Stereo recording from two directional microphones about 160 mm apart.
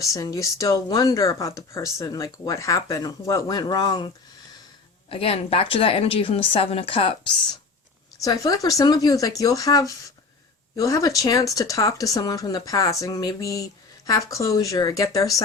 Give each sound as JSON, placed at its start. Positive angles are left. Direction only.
{"t": 0.1, "sound": "a woman's voice", "side_deg": 20}
{"t": 8.2, "sound": "speech", "side_deg": 20}